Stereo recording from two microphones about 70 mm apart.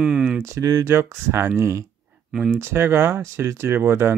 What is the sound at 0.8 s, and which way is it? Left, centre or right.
Speech, right.